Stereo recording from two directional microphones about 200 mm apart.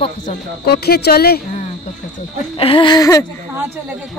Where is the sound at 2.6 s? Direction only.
25° left (ahead or behind).